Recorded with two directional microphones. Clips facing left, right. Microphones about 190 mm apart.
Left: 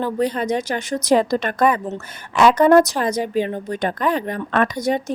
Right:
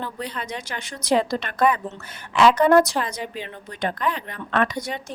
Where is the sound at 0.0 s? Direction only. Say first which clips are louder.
Left 10 dB; 45° left (ahead or behind).